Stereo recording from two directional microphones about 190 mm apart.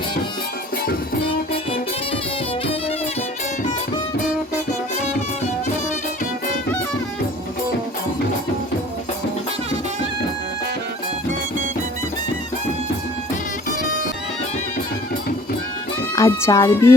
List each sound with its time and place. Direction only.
16.1 s speech: 15° left (ahead or behind)